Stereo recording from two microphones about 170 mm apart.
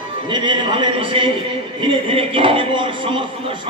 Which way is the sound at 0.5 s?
25° right (ahead or behind).